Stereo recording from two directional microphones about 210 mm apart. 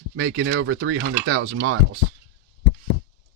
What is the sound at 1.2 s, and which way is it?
Speech, 90° right.